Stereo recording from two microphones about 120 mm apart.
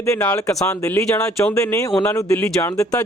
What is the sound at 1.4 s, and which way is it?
Speech, 20° left (ahead or behind).